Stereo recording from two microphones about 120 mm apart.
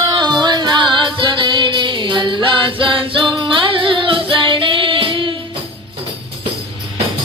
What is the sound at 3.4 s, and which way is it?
Child singing, 45° right (ahead or behind).